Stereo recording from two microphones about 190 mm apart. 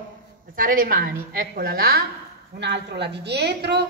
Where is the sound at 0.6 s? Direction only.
45° right (ahead or behind).